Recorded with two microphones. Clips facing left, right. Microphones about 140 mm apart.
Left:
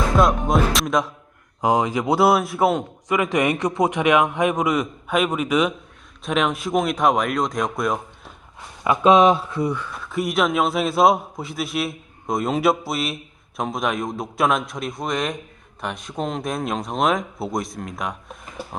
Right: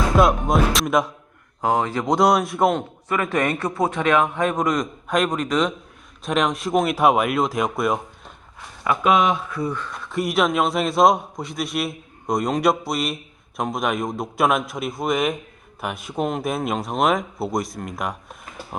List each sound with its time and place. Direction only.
0.2 s music: centre (ahead or behind)
1.6 s a man's voice: 15° left (ahead or behind); by 8.3 s 5° right (ahead or behind)
9.0 s speech: 30° left (ahead or behind)
9.6 s a man's voice: 10° left (ahead or behind)